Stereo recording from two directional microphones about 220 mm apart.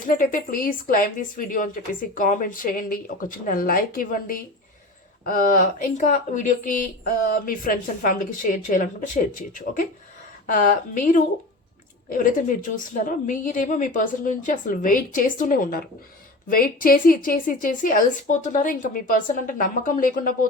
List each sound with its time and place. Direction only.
0.0 s speech: 40° left (ahead or behind)